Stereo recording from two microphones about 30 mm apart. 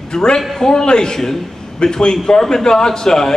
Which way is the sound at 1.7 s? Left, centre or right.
Left.